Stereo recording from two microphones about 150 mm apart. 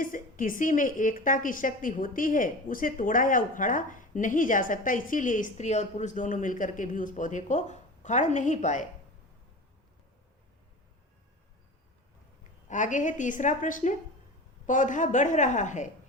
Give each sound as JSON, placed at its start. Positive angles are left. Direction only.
{"t": 0.0, "sound": "a woman's voice", "side_deg": 65}
{"t": 12.6, "sound": "a woman's voice", "side_deg": 55}